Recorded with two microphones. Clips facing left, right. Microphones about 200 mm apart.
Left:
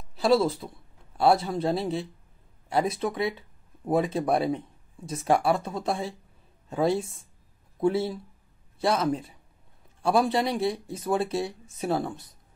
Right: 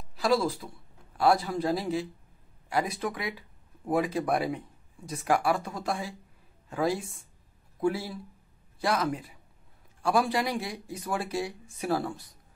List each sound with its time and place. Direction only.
0.1 s a man's voice: 25° left (ahead or behind)